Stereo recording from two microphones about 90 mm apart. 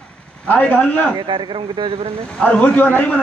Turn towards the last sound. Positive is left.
turn(degrees=15)  # may be behind; listen again after turning